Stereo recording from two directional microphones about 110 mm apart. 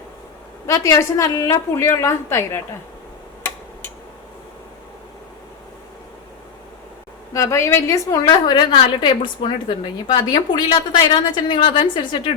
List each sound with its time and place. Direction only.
0.7 s a woman's voice: 30° left (ahead or behind)
7.3 s a woman's voice: 25° left (ahead or behind); by 10.2 s 55° left (ahead or behind)
10.2 s a woman's voice: 40° left (ahead or behind)